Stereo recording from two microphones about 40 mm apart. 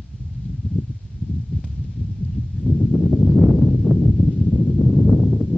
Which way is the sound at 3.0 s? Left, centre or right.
Centre.